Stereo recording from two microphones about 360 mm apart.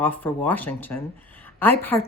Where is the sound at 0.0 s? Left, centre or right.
Centre.